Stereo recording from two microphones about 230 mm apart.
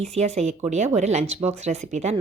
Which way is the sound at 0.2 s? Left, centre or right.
Right.